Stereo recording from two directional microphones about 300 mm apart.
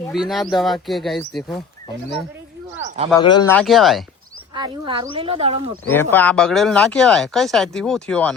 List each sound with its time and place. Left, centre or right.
0.1 s speech: centre
2.8 s a sound: right
3.1 s speech: centre
4.5 s speech: centre
5.9 s speech: centre